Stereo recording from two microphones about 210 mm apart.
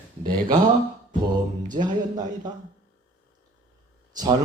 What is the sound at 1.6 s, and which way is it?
Music, 35° right (ahead or behind).